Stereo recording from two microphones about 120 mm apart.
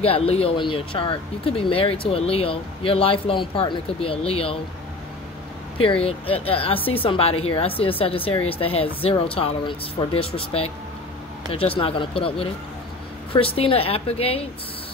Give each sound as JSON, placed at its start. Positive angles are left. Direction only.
{"t": 0.0, "sound": "speech", "side_deg": 55}
{"t": 6.0, "sound": "speech", "side_deg": 50}